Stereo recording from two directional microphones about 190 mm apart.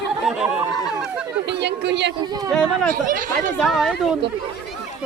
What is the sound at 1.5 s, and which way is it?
Speech, 65° right (ahead or behind).